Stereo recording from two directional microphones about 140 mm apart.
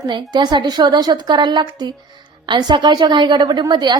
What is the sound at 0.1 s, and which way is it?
A woman's voice, 30° right (ahead or behind).